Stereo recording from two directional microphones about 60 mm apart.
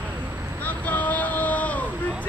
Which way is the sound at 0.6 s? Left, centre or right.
Left.